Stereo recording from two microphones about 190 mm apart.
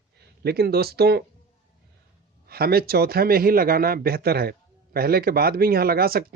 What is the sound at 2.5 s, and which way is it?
Speech, 55° right (ahead or behind).